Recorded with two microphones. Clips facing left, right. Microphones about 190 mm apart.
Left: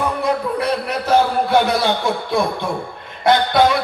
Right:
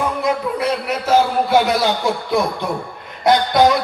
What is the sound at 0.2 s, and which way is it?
A man's voice, 10° right (ahead or behind).